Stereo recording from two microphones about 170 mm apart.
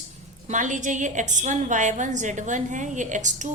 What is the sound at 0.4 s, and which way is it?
A woman's voice, 45° right (ahead or behind).